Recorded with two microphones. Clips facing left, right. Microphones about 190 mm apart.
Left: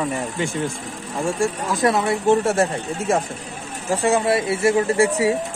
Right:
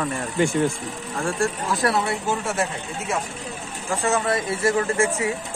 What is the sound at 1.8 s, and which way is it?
Speech, 20° left (ahead or behind).